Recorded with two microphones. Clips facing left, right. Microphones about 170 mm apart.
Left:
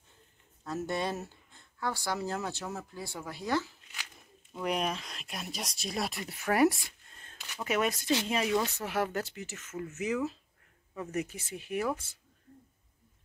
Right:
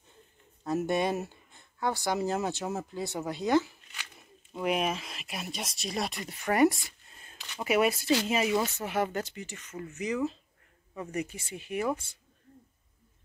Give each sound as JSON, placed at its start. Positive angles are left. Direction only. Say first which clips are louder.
{"t": 0.7, "sound": "speech", "louder": "right 5 dB", "side_deg": -15}
{"t": 4.6, "sound": "speech", "louder": "right 3 dB", "side_deg": -5}